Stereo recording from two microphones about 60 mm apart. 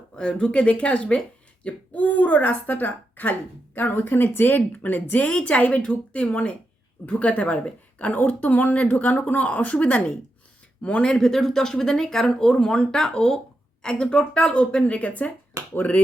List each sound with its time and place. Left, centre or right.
0.2 s a woman's voice: centre
11.1 s a woman's voice: centre; by 16.0 s left